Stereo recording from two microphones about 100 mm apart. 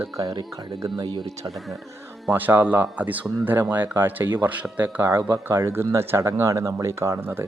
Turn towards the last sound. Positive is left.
turn(degrees=-25)  # may be behind; listen again after turning